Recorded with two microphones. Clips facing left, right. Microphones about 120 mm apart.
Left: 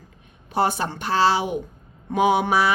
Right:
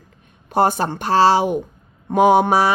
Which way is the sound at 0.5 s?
45° right (ahead or behind).